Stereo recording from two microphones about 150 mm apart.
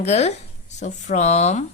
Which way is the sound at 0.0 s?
45° left (ahead or behind).